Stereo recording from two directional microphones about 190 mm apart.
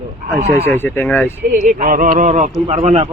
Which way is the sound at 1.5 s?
45° right (ahead or behind).